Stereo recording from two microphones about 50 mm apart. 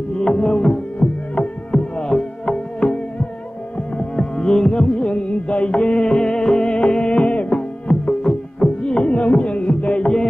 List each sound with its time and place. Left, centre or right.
0.2 s music: centre
4.2 s music: centre